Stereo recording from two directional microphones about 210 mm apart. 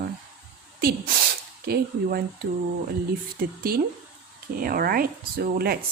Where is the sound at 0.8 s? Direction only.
45° right (ahead or behind).